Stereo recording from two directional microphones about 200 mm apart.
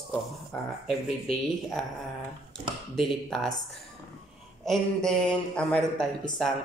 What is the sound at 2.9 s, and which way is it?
Speech, centre (ahead or behind).